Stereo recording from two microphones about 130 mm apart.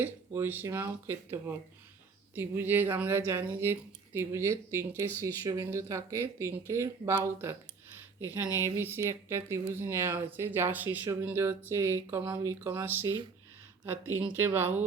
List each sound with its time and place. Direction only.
0.0 s speech: 15° right (ahead or behind)
7.4 s a sound: 15° right (ahead or behind)
8.5 s speech: 20° right (ahead or behind)